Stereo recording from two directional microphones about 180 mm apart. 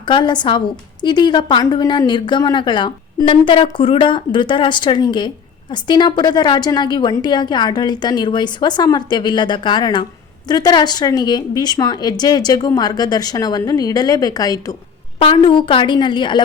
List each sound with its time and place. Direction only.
0.0 s a woman's voice: 25° left (ahead or behind)